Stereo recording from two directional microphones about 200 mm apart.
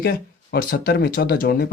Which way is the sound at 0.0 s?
50° left (ahead or behind).